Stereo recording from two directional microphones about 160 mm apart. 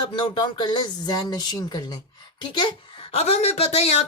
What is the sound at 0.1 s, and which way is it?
Speech, 30° left (ahead or behind).